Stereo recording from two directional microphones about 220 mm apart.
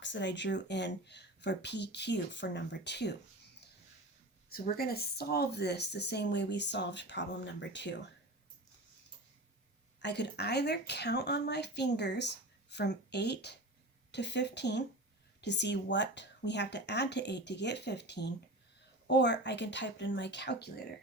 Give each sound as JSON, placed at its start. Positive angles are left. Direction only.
{"t": 0.0, "sound": "speech", "side_deg": 55}
{"t": 4.4, "sound": "speech", "side_deg": 45}
{"t": 10.0, "sound": "speech", "side_deg": 50}